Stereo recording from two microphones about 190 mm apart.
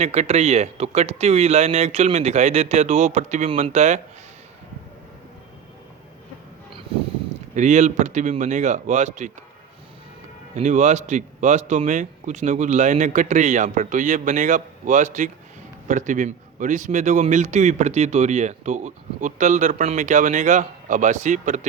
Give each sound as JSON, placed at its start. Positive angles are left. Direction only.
{"t": 0.0, "sound": "speech", "side_deg": -35}
{"t": 7.5, "sound": "speech", "side_deg": -40}
{"t": 10.5, "sound": "speech", "side_deg": -40}